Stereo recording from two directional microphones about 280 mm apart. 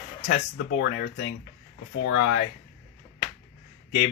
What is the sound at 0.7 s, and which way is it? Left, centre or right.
Speech, left.